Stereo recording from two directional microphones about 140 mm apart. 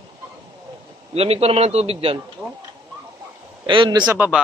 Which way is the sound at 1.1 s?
45° right (ahead or behind).